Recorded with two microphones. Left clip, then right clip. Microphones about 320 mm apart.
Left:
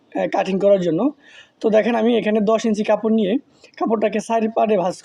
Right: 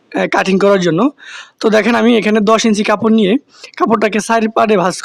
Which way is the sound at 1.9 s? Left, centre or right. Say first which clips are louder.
Right 6 dB; right.